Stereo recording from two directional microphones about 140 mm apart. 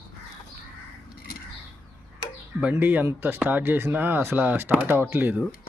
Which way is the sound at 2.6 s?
10° right (ahead or behind).